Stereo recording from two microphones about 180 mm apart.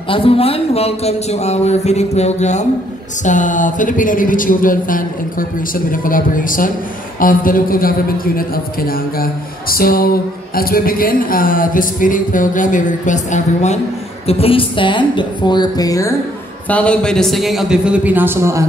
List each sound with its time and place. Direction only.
0.1 s speech: 30° left (ahead or behind)
14.2 s a woman's voice: 30° left (ahead or behind)
16.6 s a man's voice: 5° left (ahead or behind); by 18.7 s 15° right (ahead or behind)